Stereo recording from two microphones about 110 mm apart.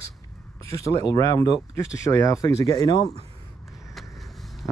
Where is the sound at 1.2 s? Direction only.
30° left (ahead or behind).